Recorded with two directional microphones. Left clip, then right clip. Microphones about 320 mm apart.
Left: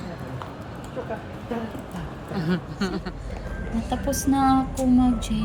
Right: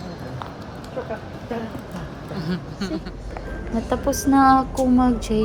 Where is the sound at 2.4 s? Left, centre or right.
Centre.